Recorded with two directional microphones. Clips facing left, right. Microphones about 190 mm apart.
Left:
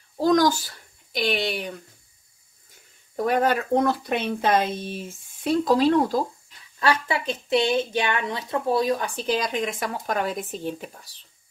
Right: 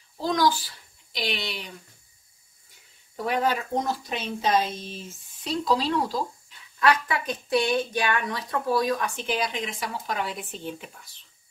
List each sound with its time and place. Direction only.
0.2 s a child's voice: 45° left (ahead or behind)
3.2 s speech: 45° left (ahead or behind)
6.8 s speech: 30° left (ahead or behind)